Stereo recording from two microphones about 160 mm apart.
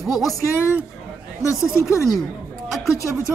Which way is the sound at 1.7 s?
20° left (ahead or behind).